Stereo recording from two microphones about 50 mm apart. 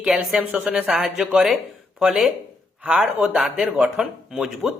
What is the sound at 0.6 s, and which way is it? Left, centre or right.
Speech, right.